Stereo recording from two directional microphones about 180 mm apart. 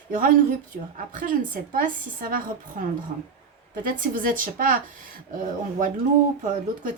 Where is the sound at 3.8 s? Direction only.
50° right (ahead or behind).